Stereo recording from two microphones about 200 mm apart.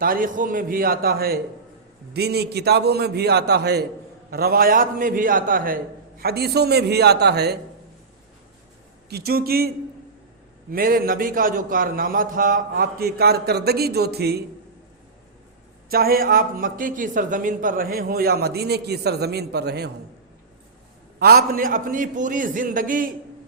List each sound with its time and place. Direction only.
0.0 s a man's voice: 45° right (ahead or behind)
9.0 s speech: 50° right (ahead or behind)
15.9 s speech: 50° right (ahead or behind)
21.2 s speech: 50° right (ahead or behind)